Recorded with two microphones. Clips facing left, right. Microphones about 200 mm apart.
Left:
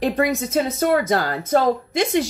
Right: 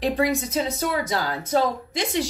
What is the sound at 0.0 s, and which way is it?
Speech, 55° left (ahead or behind).